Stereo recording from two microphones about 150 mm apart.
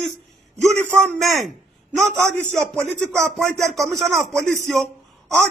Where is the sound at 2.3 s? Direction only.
50° right (ahead or behind).